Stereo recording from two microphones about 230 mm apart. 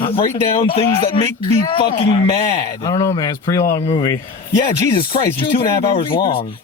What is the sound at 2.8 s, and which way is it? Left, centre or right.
A man's voice, centre.